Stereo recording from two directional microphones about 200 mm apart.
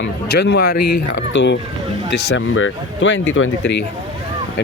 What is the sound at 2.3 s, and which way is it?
Speech, 80° left.